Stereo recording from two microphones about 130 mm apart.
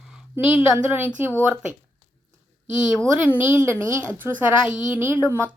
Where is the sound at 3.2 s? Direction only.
15° right (ahead or behind).